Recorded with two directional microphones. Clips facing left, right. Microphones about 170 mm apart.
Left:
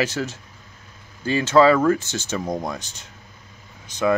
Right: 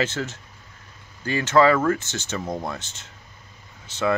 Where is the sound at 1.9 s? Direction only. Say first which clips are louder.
Left 4 dB; 20° right (ahead or behind).